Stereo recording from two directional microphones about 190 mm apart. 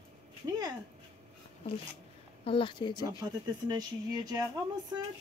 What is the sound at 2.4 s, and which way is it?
Speech, 25° left (ahead or behind).